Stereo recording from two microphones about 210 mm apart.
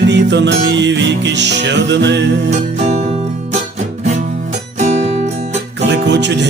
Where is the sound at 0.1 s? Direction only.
55° right (ahead or behind).